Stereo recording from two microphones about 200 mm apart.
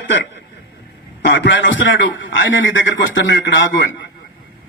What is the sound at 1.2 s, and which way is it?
A man's voice, 60° left (ahead or behind).